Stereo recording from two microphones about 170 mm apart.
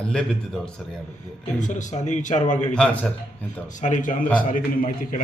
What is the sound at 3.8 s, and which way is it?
A man's voice, 50° left (ahead or behind).